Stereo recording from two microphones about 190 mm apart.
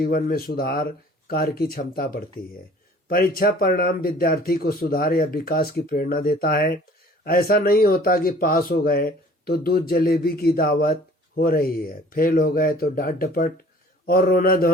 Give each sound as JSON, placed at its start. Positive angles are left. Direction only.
{"t": 0.0, "sound": "speech", "side_deg": 50}